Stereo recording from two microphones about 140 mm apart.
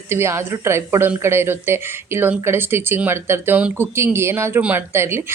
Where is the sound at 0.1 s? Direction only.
20° right (ahead or behind).